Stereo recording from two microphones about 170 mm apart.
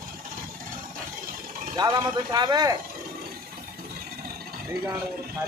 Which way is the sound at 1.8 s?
25° right (ahead or behind).